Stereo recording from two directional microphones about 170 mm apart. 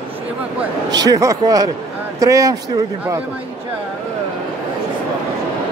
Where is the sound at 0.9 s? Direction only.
20° right (ahead or behind).